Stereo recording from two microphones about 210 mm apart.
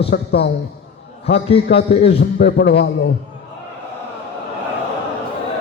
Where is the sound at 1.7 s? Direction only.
50° left (ahead or behind).